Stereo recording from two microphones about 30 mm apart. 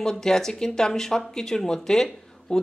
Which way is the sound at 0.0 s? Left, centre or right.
Left.